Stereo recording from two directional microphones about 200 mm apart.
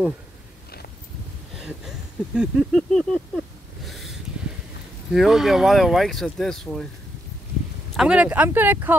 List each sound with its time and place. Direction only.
1.6 s a sound: 5° right (ahead or behind)
3.8 s snort: centre (ahead or behind)
5.1 s speech: centre (ahead or behind)
7.9 s speech: 5° right (ahead or behind)